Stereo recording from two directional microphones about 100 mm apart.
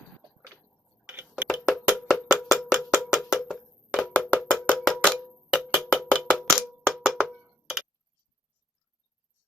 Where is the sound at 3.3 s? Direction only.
Centre (ahead or behind).